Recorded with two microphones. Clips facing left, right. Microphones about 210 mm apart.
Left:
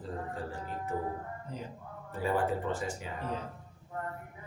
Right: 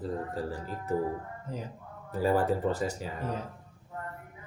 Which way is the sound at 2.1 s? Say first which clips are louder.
Right 4 dB; 40° right (ahead or behind).